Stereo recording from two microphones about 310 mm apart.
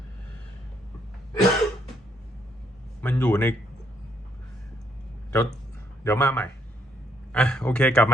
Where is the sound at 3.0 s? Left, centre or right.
Centre.